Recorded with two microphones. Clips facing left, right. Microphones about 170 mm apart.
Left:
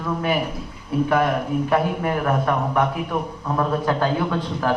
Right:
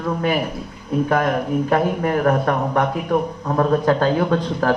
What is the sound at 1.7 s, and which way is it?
Speech, 45° right (ahead or behind).